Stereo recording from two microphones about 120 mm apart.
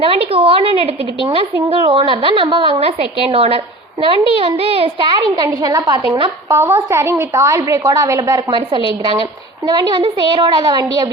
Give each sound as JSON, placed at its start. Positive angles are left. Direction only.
{"t": 0.0, "sound": "a woman's voice", "side_deg": -50}
{"t": 6.5, "sound": "a woman's voice", "side_deg": -20}
{"t": 8.4, "sound": "a woman's voice", "side_deg": -45}